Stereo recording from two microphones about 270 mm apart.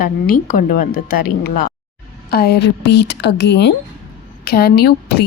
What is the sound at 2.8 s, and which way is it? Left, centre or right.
Speech, left.